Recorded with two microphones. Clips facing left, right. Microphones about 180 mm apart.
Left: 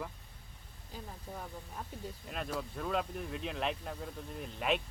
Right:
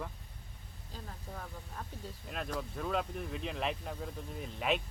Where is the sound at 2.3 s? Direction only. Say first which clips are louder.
Even; centre (ahead or behind).